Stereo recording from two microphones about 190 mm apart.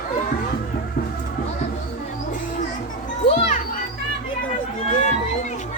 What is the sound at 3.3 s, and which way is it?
Children playing, 35° left (ahead or behind).